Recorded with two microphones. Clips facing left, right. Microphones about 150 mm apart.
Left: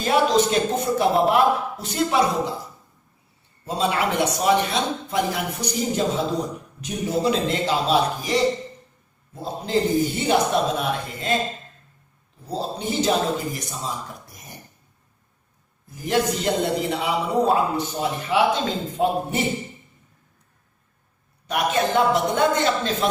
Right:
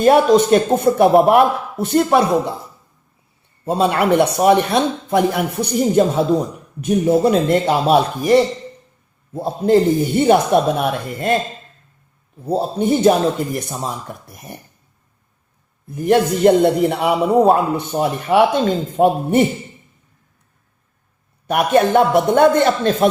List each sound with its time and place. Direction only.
0.0 s a man's voice: 55° right (ahead or behind)
3.7 s a man's voice: 55° right (ahead or behind)
12.5 s a man's voice: 55° right (ahead or behind)
15.9 s a man's voice: 60° right (ahead or behind)
21.4 s a man's voice: 60° right (ahead or behind)